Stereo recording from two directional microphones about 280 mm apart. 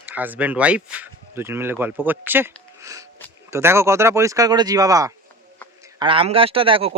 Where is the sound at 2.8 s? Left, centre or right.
Centre.